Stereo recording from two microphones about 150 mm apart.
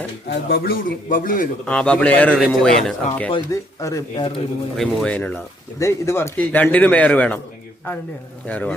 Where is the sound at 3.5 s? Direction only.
20° left (ahead or behind).